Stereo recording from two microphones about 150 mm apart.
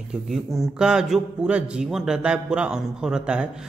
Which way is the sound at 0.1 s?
Centre (ahead or behind).